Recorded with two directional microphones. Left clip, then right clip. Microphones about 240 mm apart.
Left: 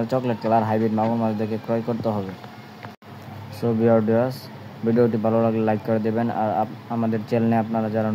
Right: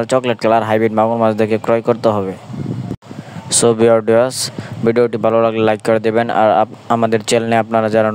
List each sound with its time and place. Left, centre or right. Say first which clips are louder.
0.0 s speech: right 9 dB; right
3.6 s speech: right 8 dB; right